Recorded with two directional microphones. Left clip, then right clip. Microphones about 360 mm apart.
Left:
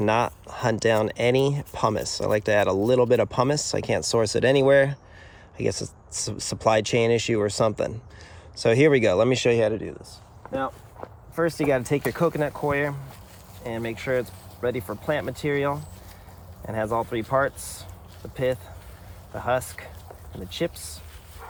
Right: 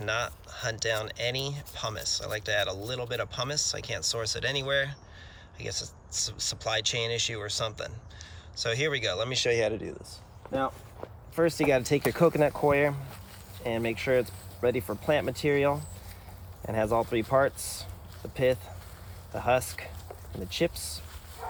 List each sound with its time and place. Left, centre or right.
0.0 s speech: centre